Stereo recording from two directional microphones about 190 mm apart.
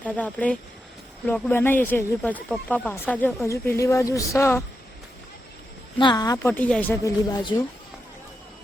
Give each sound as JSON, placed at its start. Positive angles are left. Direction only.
{"t": 0.0, "sound": "speech", "side_deg": 5}
{"t": 6.0, "sound": "speech", "side_deg": 20}